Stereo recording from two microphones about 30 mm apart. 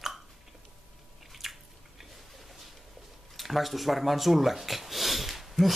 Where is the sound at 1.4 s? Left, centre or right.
Centre.